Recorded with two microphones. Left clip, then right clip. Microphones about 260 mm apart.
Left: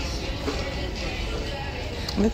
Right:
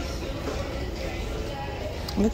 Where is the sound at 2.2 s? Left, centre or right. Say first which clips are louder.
Left 1 dB; centre.